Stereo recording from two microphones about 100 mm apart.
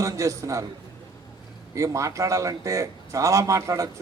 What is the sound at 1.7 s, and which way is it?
Speech, 30° right (ahead or behind).